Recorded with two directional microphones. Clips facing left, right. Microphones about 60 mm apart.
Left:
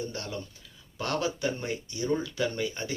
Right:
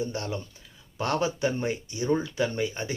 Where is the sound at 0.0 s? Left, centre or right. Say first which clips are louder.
Right 4 dB; right.